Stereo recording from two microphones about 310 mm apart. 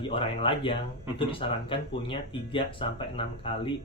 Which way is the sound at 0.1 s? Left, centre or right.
Centre.